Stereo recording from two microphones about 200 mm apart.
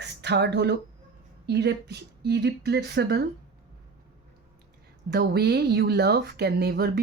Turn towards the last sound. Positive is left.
turn(degrees=-55)  # may be behind; listen again after turning